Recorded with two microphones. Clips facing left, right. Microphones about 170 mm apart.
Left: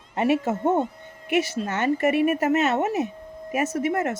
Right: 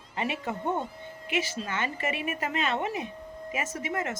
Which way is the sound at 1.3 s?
65° left (ahead or behind).